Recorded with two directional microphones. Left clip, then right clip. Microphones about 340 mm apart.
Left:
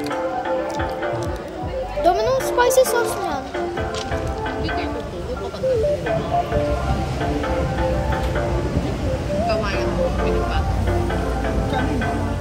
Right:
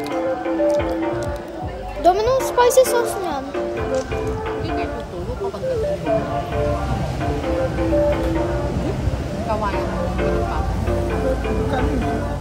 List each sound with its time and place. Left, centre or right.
2.0 s speech: centre
2.5 s music: centre